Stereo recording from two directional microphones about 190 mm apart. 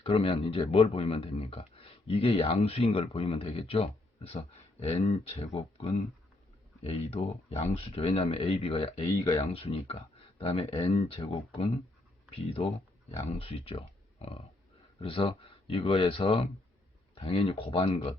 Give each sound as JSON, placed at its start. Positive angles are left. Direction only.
{"t": 0.0, "sound": "speech", "side_deg": 30}